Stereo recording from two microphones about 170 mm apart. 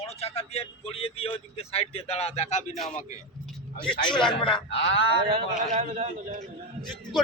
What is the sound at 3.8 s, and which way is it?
Speech, 30° left (ahead or behind).